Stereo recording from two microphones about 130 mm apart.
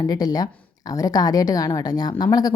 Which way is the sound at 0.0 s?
30° left (ahead or behind).